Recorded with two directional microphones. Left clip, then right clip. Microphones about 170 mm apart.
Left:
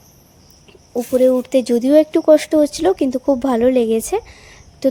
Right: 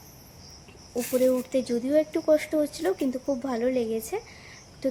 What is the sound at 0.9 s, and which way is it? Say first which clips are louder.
A woman's voice: left 10 dB; 35° left (ahead or behind).